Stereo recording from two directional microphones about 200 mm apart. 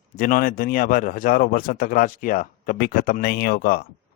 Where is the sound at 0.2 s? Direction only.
45° left (ahead or behind).